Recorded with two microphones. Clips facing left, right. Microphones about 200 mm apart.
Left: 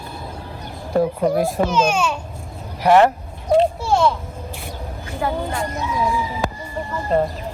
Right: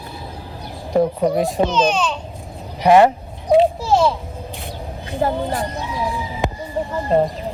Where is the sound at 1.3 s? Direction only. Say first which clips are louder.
Right 1 dB; 5° left (ahead or behind).